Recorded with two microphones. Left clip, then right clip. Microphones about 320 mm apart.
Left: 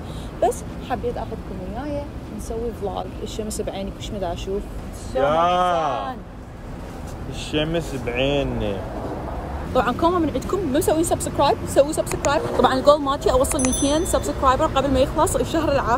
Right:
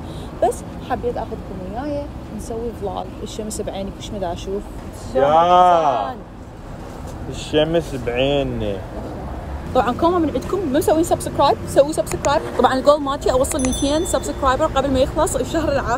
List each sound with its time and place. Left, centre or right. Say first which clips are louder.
0.4 s a sound: right 2 dB; centre
1.8 s speech: right 4 dB; centre
5.2 s speech: right 6 dB; right
7.5 s speech: right 6 dB; centre
9.8 s speech: right 2 dB; centre